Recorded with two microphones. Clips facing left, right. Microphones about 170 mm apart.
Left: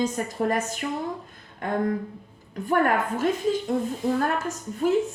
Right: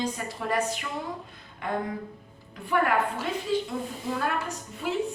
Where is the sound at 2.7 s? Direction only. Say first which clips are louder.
Left 3 dB; 45° left (ahead or behind).